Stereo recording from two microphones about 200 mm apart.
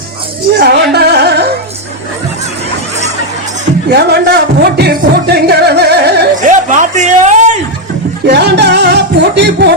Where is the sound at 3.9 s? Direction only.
55° right (ahead or behind).